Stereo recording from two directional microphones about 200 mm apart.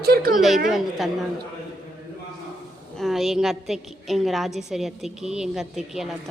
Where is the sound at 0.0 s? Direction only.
50° right (ahead or behind).